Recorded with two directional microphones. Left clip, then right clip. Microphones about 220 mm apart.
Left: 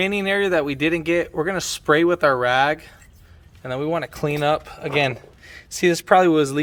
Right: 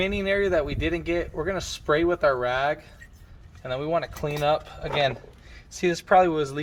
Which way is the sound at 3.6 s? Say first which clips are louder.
Left 2 dB; 30° left (ahead or behind).